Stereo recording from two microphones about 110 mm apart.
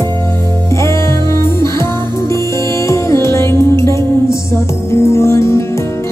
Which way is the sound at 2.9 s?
25° left (ahead or behind).